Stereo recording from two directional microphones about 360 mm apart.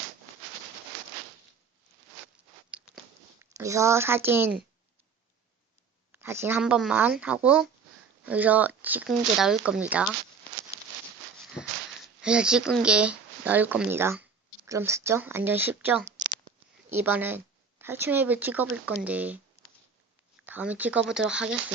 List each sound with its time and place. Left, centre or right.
2.2 s zipper: centre
3.5 s speech: centre
6.1 s speech: centre
12.2 s speech: centre
19.6 s a sound: centre
20.4 s speech: centre